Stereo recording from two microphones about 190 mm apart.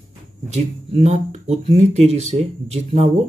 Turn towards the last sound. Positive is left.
turn(degrees=-35)  # may be behind; listen again after turning